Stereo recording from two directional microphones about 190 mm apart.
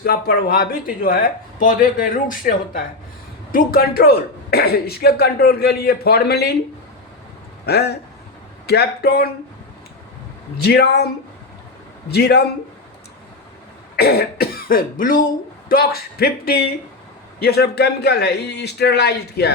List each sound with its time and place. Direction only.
0.0 s speech: 55° left (ahead or behind)
7.6 s a man's voice: 60° left (ahead or behind)
10.6 s speech: 60° left (ahead or behind)
12.1 s speech: 60° left (ahead or behind)
13.9 s cough: 55° left (ahead or behind)
15.7 s speech: 55° left (ahead or behind)